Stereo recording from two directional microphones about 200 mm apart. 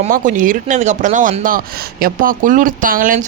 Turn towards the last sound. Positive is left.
turn(degrees=-40)  # may be behind; listen again after turning